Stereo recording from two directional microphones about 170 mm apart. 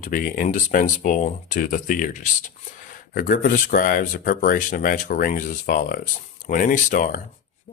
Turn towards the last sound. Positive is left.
turn(degrees=50)  # may be behind; listen again after turning